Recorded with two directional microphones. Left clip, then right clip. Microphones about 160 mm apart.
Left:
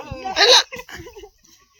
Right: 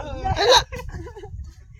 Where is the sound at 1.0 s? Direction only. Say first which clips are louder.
Even; 15° left (ahead or behind).